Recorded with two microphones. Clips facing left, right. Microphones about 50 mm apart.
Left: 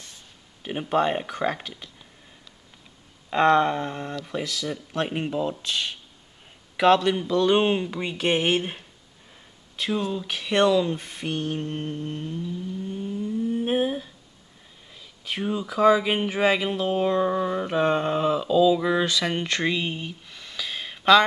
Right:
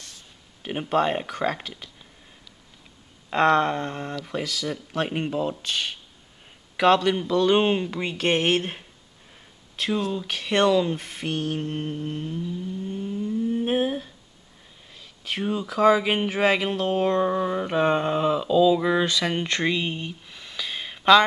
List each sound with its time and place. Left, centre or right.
0.6 s speech: centre
3.3 s speech: centre
9.8 s speech: centre